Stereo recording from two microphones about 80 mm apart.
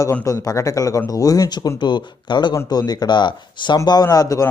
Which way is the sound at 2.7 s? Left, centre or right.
Left.